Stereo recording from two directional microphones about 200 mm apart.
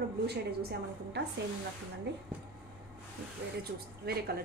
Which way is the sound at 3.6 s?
50° right (ahead or behind).